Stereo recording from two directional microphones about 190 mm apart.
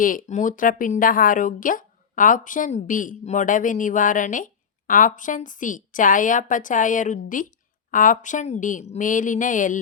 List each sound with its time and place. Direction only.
0.0 s speech: 45° left (ahead or behind)